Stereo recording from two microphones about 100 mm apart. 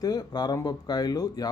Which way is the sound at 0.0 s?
40° left (ahead or behind).